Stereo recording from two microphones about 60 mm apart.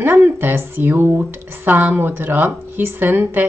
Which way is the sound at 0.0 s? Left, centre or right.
Right.